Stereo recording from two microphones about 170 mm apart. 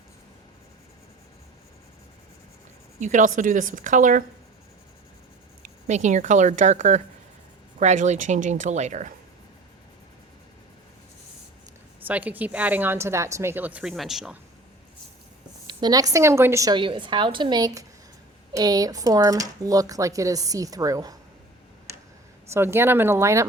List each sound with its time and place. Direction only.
3.0 s speech: 45° right (ahead or behind)
5.6 s speech: 45° right (ahead or behind)
12.0 s speech: 10° right (ahead or behind)
15.6 s speech: 25° right (ahead or behind)
22.5 s speech: 15° right (ahead or behind)